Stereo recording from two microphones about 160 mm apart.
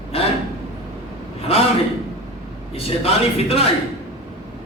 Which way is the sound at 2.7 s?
40° left (ahead or behind).